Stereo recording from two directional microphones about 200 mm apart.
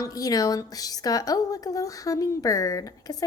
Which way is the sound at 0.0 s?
15° left (ahead or behind).